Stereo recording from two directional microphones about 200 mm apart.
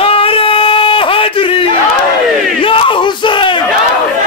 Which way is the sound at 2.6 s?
25° left (ahead or behind).